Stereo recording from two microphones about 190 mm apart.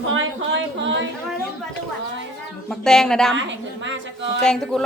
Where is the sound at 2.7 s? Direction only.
5° left (ahead or behind).